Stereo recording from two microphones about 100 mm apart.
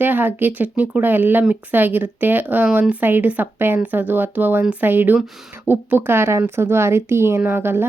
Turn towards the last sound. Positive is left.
turn(degrees=-25)  # may be behind; listen again after turning